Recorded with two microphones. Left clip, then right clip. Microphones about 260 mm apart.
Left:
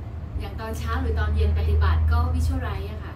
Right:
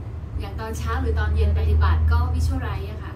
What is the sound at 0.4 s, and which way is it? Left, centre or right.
A woman's voice, centre.